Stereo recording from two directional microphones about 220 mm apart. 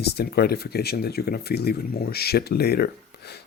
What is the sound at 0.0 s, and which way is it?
Speech, 45° left (ahead or behind).